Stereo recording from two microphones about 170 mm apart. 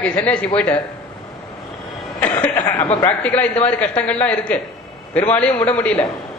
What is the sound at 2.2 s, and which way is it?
Speech, 10° left (ahead or behind).